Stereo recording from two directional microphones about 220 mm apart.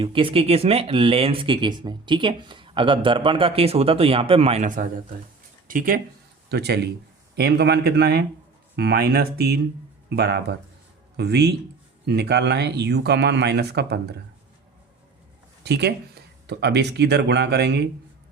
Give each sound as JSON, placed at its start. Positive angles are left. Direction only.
{"t": 0.0, "sound": "speech", "side_deg": -25}
{"t": 15.6, "sound": "speech", "side_deg": -50}